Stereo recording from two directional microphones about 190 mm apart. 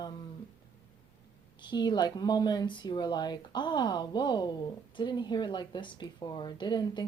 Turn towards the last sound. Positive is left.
turn(degrees=20)  # may be behind; listen again after turning